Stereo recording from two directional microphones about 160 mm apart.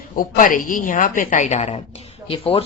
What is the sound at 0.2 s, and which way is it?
A woman's voice, 55° left (ahead or behind).